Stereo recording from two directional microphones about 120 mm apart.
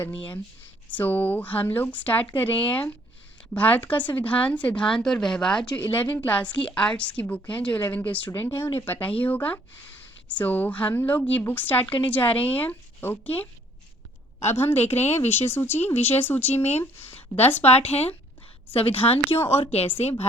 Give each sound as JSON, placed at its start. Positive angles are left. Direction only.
{"t": 0.9, "sound": "a woman's voice", "side_deg": 15}
{"t": 14.5, "sound": "a woman's voice", "side_deg": 15}
{"t": 14.9, "sound": "a woman's voice", "side_deg": 65}
{"t": 15.3, "sound": "a woman's voice", "side_deg": 20}
{"t": 17.6, "sound": "a woman's voice", "side_deg": 60}